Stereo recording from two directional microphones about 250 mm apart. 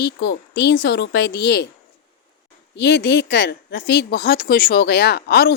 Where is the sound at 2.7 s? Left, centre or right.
Left.